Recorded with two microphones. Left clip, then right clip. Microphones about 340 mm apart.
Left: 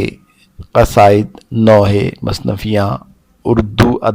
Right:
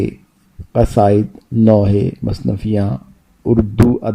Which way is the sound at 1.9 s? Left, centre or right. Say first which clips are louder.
Left 3 dB; left.